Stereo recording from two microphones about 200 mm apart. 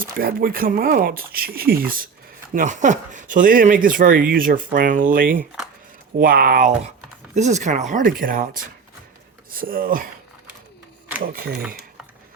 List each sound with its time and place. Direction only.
0.2 s speech: 50° right (ahead or behind)